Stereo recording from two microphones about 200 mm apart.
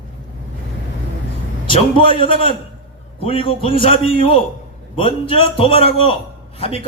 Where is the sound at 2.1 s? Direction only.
25° left (ahead or behind).